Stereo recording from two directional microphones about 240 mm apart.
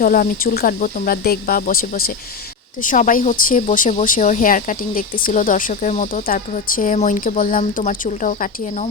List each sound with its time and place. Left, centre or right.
0.0 s speech: left